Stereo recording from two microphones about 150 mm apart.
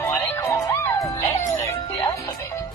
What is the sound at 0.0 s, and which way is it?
Music, 15° left (ahead or behind).